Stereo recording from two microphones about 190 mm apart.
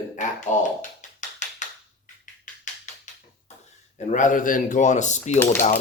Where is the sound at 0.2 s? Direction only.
40° left (ahead or behind).